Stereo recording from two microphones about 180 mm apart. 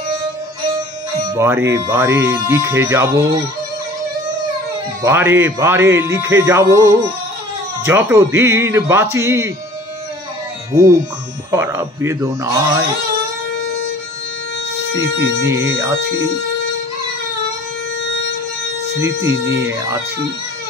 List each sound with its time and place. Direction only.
1.3 s a man's voice: 15° right (ahead or behind)
5.0 s a man's voice: 15° right (ahead or behind)
10.7 s a man's voice: 20° right (ahead or behind)
15.0 s a man's voice: 15° right (ahead or behind)
18.9 s a man's voice: 15° right (ahead or behind)